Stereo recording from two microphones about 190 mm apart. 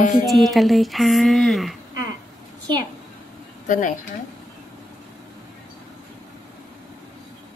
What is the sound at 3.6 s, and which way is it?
Speech, 45° left (ahead or behind).